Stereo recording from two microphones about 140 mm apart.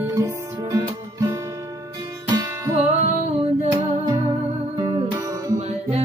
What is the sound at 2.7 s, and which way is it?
Music, 50° right (ahead or behind).